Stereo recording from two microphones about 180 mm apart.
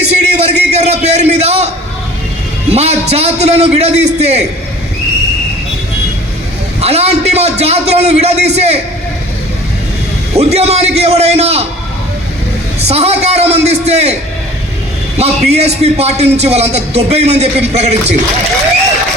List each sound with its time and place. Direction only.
0.1 s a sound: 40° right (ahead or behind)
2.6 s speech: 35° right (ahead or behind)
6.8 s speech: 35° right (ahead or behind)
10.3 s speech: 35° right (ahead or behind)
12.8 s speech: 35° right (ahead or behind)
15.2 s speech: 35° right (ahead or behind)